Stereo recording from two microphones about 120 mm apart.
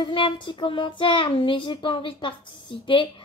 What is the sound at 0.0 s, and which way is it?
A woman's voice, 45° left (ahead or behind).